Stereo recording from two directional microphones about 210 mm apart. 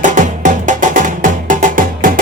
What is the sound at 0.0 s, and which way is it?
Music, 35° right (ahead or behind).